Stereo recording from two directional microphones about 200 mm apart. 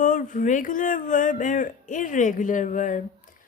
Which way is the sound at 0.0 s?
40° left (ahead or behind).